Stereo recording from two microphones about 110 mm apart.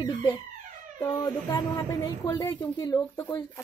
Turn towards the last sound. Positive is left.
turn(degrees=30)  # may be behind; listen again after turning